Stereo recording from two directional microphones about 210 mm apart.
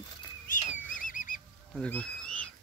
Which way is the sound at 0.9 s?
40° left (ahead or behind).